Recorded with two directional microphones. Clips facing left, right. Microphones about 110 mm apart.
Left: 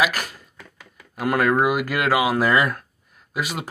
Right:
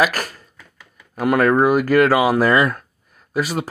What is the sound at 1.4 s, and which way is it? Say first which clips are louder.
Speech: right 4 dB; 40° right (ahead or behind).